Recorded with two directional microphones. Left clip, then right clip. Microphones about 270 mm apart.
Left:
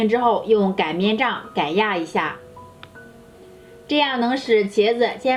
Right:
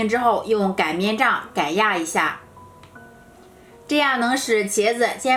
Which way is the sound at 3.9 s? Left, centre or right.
Right.